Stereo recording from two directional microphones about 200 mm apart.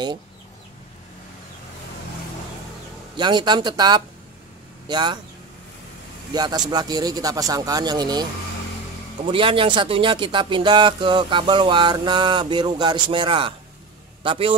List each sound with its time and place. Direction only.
3.2 s speech: 20° right (ahead or behind)
6.3 s speech: 20° right (ahead or behind)